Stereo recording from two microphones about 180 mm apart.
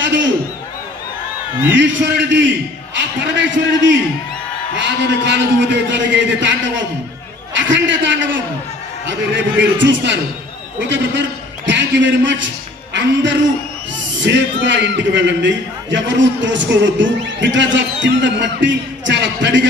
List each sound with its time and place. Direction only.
0.0 s a sound: 85° right
1.8 s a man's voice: 80° right
4.7 s a man's voice: 75° right (ahead or behind)
7.5 s a man's voice: 90° right
14.2 s a man's voice: 85° right